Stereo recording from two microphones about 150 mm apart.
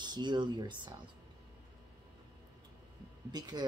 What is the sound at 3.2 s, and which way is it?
Speech, 25° right (ahead or behind).